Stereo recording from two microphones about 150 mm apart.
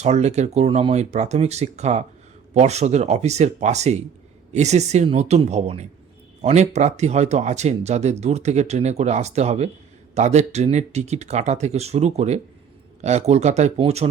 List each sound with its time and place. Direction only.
0.0 s speech: 50° right (ahead or behind)